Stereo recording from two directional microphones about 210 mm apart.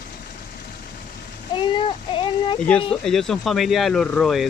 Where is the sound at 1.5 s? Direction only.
25° left (ahead or behind).